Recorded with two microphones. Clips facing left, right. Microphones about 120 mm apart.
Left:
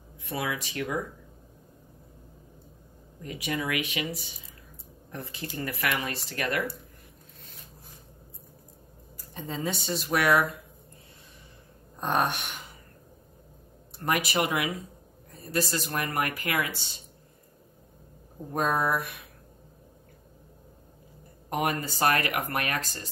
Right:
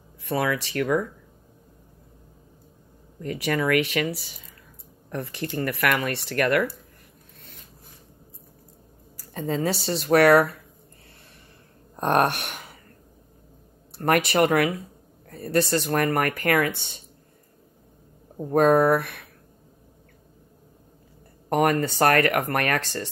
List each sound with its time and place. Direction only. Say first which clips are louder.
0.2 s speech: right 7 dB; 65° right (ahead or behind)
3.2 s speech: right 7 dB; 75° right (ahead or behind); by 6.7 s 60° right (ahead or behind)
9.3 s speech: right 8 dB; 80° right
9.7 s speech: right 5 dB; centre (ahead or behind)
10.0 s speech: right 8 dB; 65° right (ahead or behind)
12.0 s speech: right 6 dB; 65° right (ahead or behind)
14.3 s speech: right 7 dB; 55° right (ahead or behind)
18.5 s speech: right 9 dB; 60° right (ahead or behind)
21.5 s speech: right 8 dB; 60° right (ahead or behind)